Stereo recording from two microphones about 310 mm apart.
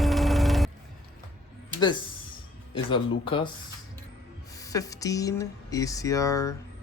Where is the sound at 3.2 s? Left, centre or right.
Centre.